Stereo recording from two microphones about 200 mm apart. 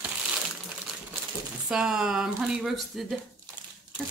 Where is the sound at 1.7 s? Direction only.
5° right (ahead or behind).